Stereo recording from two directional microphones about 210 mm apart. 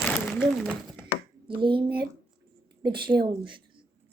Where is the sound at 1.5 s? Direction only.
25° right (ahead or behind).